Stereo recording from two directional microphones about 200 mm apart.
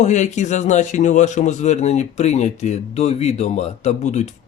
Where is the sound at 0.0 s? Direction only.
35° left (ahead or behind).